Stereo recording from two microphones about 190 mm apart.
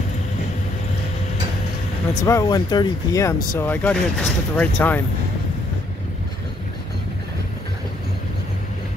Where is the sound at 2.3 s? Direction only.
20° left (ahead or behind).